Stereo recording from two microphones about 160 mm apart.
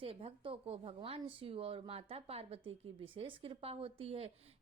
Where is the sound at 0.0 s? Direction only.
35° right (ahead or behind).